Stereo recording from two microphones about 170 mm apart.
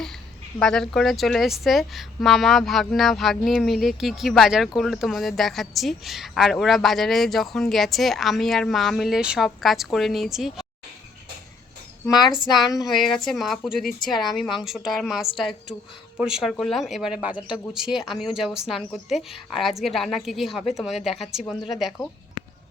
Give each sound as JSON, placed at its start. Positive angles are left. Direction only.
{"t": 0.6, "sound": "speech", "side_deg": 5}
{"t": 12.0, "sound": "speech", "side_deg": 25}
{"t": 12.9, "sound": "speech", "side_deg": 0}
{"t": 19.8, "sound": "speech", "side_deg": 0}